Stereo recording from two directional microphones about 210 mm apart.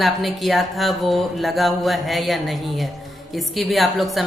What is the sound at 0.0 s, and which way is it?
A woman's voice, centre (ahead or behind).